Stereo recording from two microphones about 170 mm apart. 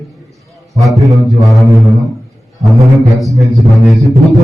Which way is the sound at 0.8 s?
Centre (ahead or behind).